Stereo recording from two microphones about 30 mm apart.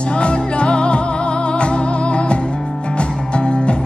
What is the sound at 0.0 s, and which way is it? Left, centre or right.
Music, left.